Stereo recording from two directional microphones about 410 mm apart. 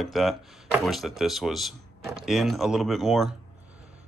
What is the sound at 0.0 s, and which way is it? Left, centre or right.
Speech, centre.